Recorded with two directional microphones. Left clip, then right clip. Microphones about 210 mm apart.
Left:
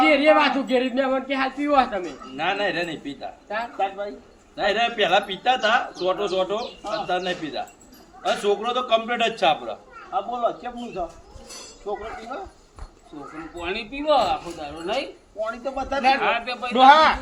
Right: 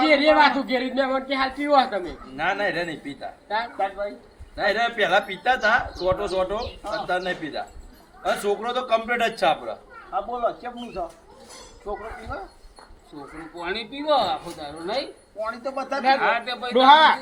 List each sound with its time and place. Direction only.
0.3 s a man's voice: 15° left (ahead or behind)
2.3 s a man's voice: 10° right (ahead or behind)
12.3 s a man's voice: 10° right (ahead or behind)
13.6 s speech: centre (ahead or behind)
15.4 s a man's voice: 10° right (ahead or behind)
16.7 s speech: 45° left (ahead or behind)